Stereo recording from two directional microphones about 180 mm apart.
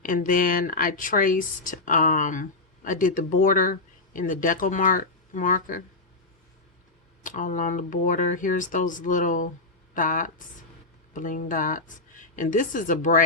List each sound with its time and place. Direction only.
0.0 s speech: 50° left (ahead or behind)
7.2 s speech: 45° left (ahead or behind)